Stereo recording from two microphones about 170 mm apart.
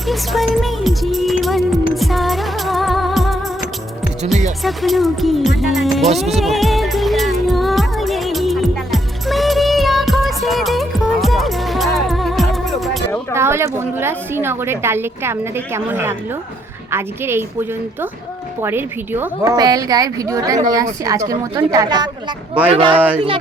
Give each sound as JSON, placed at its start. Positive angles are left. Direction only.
{"t": 0.1, "sound": "music", "side_deg": 0}
{"t": 4.6, "sound": "speech", "side_deg": 0}
{"t": 6.1, "sound": "music", "side_deg": 0}
{"t": 13.3, "sound": "a woman's voice", "side_deg": -15}